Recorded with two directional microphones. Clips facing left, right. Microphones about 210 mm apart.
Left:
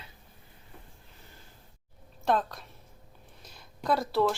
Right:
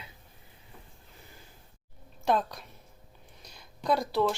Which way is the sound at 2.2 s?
Centre (ahead or behind).